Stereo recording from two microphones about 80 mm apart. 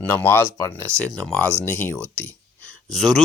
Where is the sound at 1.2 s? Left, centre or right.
Centre.